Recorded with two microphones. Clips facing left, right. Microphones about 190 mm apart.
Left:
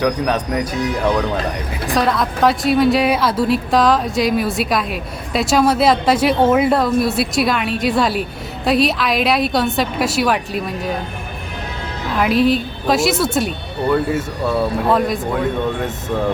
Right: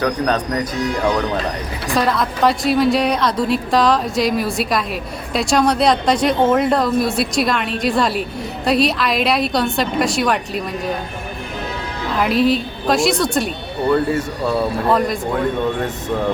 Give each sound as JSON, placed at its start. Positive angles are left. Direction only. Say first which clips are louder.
{"t": 0.0, "sound": "speech", "louder": "left 1 dB", "side_deg": 10}
{"t": 2.0, "sound": "a woman's voice", "louder": "left 1 dB", "side_deg": 0}
{"t": 12.1, "sound": "a woman's voice", "louder": "left 1 dB", "side_deg": 0}